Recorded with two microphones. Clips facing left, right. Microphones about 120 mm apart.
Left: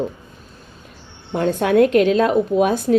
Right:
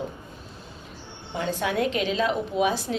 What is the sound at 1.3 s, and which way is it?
A woman's voice, 55° left (ahead or behind).